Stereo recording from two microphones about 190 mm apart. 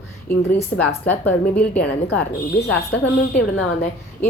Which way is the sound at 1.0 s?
10° left (ahead or behind).